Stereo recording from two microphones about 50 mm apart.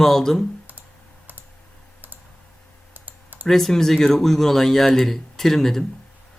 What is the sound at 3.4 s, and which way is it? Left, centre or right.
Speech, centre.